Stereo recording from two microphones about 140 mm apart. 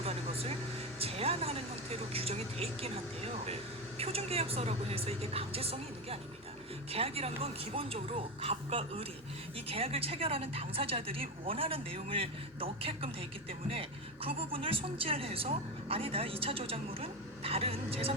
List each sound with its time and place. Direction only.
0.0 s vehicle: 45° right (ahead or behind)
0.9 s speech: 45° right (ahead or behind)